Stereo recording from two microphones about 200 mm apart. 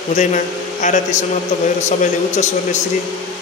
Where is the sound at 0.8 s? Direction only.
35° left (ahead or behind).